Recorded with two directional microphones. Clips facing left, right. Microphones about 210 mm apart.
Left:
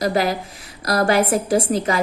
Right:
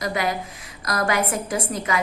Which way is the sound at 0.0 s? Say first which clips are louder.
Left 5 dB; 35° left (ahead or behind).